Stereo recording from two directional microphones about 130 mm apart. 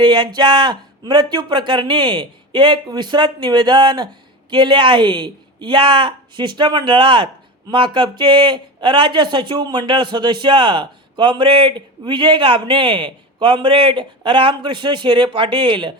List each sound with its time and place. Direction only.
0.0 s speech: 35° right (ahead or behind)